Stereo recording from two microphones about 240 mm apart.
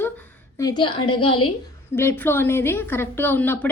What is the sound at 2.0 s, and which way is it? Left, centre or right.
A woman's voice, centre.